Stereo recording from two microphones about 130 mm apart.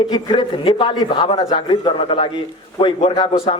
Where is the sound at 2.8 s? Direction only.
55° left (ahead or behind).